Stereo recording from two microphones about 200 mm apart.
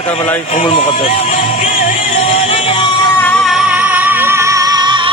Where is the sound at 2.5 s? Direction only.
30° left (ahead or behind).